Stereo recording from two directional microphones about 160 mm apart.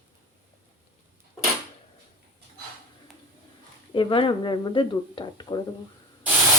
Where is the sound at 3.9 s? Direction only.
30° left (ahead or behind).